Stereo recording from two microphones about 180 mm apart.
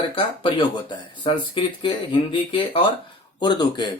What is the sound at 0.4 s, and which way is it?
Speech, 30° left (ahead or behind).